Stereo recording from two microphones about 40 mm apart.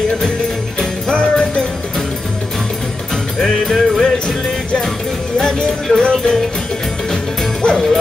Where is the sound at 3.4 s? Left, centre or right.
Centre.